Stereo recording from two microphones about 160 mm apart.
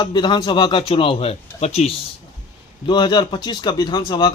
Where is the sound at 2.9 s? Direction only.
30° left (ahead or behind).